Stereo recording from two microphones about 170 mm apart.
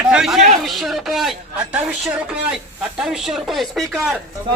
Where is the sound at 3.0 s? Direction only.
Centre (ahead or behind).